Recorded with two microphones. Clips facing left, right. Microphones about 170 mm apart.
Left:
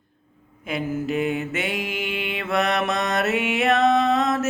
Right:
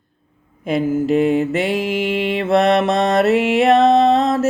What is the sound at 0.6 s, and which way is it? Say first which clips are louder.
Mantra: right 8 dB; 35° right (ahead or behind).